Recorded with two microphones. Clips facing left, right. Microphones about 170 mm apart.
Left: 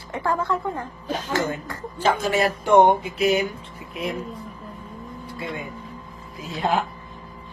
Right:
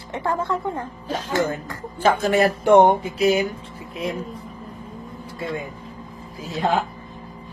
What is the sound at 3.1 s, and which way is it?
A woman's voice, 30° right (ahead or behind).